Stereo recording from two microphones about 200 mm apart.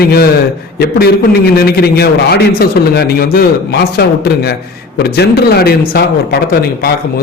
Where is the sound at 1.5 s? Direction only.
50° left (ahead or behind).